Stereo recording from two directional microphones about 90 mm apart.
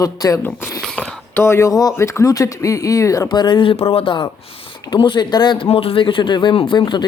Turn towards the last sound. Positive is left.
turn(degrees=60)  # may be behind; listen again after turning